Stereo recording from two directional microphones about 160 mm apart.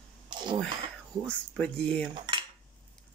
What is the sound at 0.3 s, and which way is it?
Cough, 30° right (ahead or behind).